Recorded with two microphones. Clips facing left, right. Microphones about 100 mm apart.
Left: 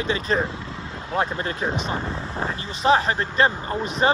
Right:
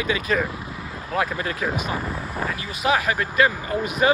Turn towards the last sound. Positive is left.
turn(degrees=35)  # may be behind; listen again after turning